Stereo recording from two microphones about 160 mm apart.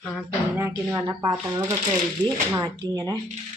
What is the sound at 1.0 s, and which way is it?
Speech, 25° right (ahead or behind).